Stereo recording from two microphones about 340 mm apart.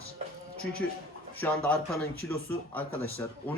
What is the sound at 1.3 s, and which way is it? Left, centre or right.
Speech, centre.